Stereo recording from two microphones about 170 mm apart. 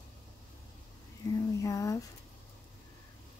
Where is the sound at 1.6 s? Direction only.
20° left (ahead or behind).